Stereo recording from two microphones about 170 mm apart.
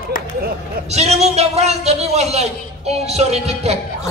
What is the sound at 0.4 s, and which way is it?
Speech, 60° right (ahead or behind).